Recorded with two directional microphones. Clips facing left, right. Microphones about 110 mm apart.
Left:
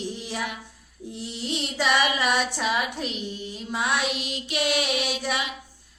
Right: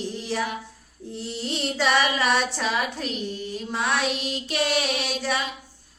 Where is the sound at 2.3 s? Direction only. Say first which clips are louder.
Right 1 dB; 10° left (ahead or behind).